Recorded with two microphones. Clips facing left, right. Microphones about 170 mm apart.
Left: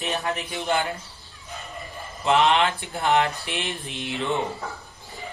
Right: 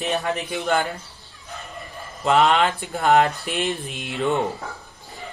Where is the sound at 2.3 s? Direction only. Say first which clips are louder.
Right 2 dB; 40° right (ahead or behind).